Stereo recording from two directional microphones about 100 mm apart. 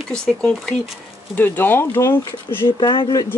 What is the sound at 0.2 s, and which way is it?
Speech, 5° left (ahead or behind).